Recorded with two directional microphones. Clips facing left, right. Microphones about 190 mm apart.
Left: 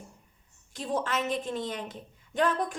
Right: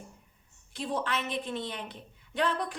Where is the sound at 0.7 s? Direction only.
45° left (ahead or behind).